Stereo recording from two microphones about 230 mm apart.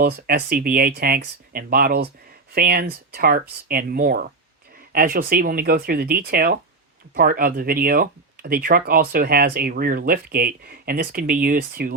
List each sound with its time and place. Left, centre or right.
0.0 s speech: right